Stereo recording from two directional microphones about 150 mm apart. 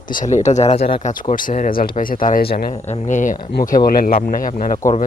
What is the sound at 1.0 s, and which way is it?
Speech, 60° left (ahead or behind).